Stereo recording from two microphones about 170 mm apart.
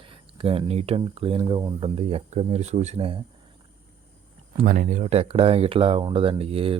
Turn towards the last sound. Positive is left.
turn(degrees=-35)  # may be behind; listen again after turning